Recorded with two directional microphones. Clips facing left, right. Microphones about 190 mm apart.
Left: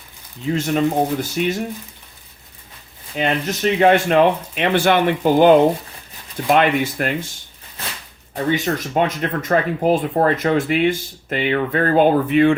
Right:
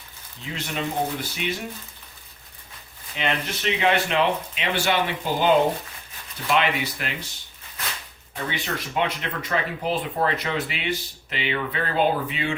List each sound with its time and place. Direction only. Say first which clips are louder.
0.5 s speech: left 10 dB; 45° left (ahead or behind)
3.2 s speech: left 7 dB; 40° left (ahead or behind)
8.4 s speech: left 10 dB; 45° left (ahead or behind)